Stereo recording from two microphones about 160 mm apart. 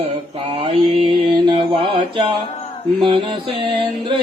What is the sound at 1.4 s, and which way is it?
Mantra, 30° right (ahead or behind).